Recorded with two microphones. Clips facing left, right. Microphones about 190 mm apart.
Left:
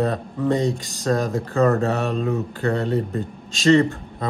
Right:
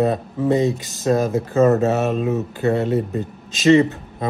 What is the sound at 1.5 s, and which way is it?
Speech, 20° right (ahead or behind).